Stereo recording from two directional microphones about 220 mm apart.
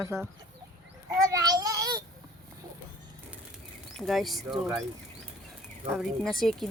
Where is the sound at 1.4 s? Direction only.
15° right (ahead or behind).